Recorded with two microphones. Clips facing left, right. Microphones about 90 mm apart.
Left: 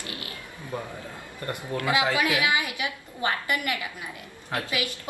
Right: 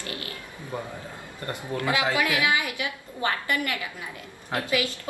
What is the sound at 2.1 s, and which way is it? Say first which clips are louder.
A woman's voice: even; 20° left (ahead or behind).